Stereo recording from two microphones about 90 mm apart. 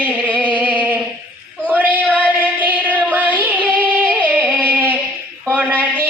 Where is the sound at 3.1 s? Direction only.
20° right (ahead or behind).